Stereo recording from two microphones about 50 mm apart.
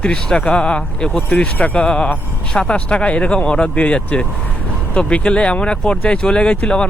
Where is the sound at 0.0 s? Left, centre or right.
Centre.